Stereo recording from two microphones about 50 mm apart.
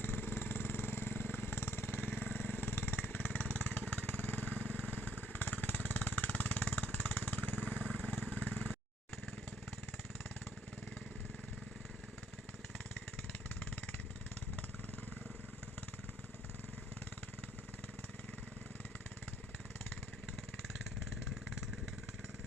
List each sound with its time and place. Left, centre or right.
0.0 s vehicle: left
13.6 s vehicle: left